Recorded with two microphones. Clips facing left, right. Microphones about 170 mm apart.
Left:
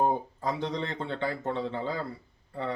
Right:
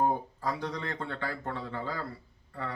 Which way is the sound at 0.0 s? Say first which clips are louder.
Left 2 dB; 20° left (ahead or behind).